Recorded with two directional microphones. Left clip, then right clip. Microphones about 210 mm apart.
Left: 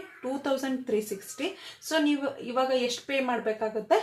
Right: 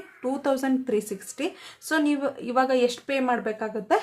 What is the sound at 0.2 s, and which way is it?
Speech, 30° right (ahead or behind).